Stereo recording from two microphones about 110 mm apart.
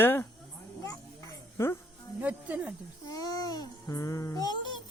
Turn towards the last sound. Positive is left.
turn(degrees=30)  # may be behind; listen again after turning